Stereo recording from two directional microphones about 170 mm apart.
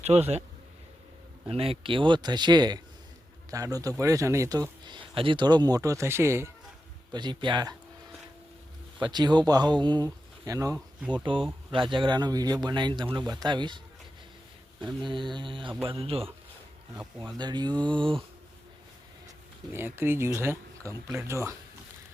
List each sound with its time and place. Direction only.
0.0 s speech: 40° right (ahead or behind)
1.5 s a man's voice: 35° right (ahead or behind); by 6.5 s 15° right (ahead or behind)
7.1 s a man's voice: 25° right (ahead or behind)
9.0 s a man's voice: 25° right (ahead or behind)
19.7 s speech: 15° right (ahead or behind)